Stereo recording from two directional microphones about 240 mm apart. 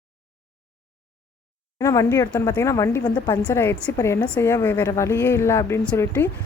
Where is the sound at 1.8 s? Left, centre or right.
Centre.